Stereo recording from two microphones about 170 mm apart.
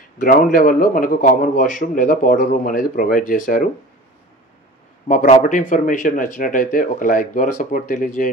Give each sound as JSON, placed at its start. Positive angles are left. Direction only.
{"t": 0.2, "sound": "a man's voice", "side_deg": 55}
{"t": 5.0, "sound": "a man's voice", "side_deg": 45}